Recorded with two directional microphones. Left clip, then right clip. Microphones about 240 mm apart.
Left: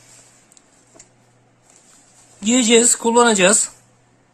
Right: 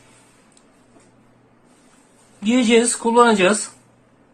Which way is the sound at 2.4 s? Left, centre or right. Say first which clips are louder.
Left 2 dB; left.